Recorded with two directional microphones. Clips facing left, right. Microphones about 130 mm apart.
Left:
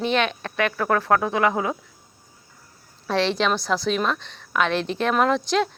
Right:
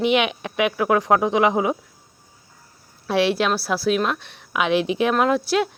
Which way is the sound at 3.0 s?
10° right (ahead or behind).